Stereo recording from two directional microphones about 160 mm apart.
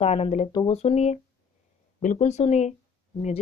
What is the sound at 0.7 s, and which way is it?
A woman's voice, 45° left (ahead or behind).